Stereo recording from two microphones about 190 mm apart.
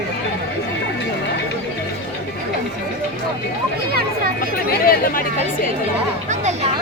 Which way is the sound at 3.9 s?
55° right (ahead or behind).